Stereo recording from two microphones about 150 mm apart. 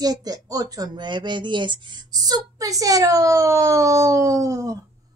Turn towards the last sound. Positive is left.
turn(degrees=-20)  # may be behind; listen again after turning